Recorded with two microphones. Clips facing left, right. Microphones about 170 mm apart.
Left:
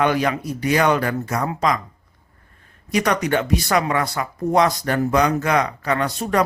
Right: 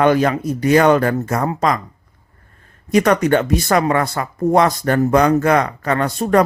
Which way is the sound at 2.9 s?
50° right (ahead or behind).